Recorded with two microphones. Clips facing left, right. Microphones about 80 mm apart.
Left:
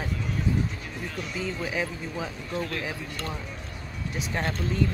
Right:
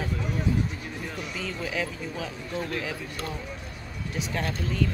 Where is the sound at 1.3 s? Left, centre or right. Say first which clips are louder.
Left 2 dB; centre.